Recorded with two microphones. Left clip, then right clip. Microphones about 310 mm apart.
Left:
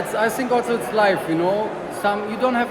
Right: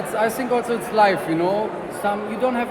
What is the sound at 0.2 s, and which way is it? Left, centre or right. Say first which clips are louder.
Speech: left 1 dB; centre.